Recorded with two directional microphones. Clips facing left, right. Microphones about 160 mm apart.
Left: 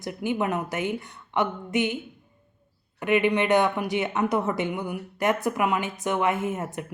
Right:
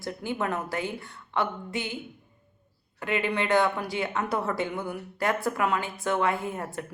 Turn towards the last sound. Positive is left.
turn(degrees=20)  # may be behind; listen again after turning